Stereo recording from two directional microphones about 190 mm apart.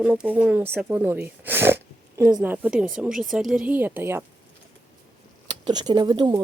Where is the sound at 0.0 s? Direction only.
5° right (ahead or behind).